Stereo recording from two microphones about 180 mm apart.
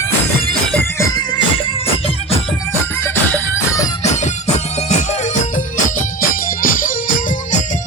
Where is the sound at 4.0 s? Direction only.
40° left (ahead or behind).